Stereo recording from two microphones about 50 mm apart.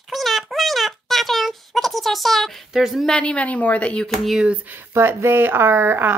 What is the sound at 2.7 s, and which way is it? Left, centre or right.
Speech, centre.